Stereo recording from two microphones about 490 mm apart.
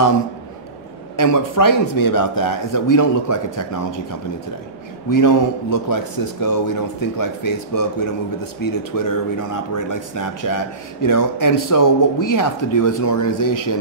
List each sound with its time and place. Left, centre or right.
1.1 s speech: left
5.1 s speech: left